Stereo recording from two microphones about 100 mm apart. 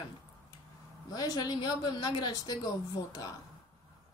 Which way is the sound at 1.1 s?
40° left (ahead or behind).